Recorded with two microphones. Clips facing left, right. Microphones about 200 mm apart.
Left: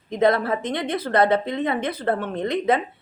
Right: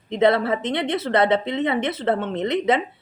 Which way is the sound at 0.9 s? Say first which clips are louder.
Even; 25° right (ahead or behind).